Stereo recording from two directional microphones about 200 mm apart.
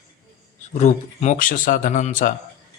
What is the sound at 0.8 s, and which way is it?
A man's voice, 35° left (ahead or behind).